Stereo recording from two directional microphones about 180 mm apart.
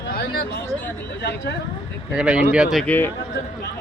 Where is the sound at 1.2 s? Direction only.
70° left (ahead or behind).